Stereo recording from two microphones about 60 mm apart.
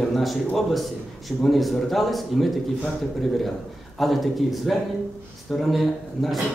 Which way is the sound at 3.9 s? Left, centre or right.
Centre.